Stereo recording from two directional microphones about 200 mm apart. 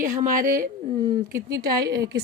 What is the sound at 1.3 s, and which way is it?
Speech, 15° right (ahead or behind).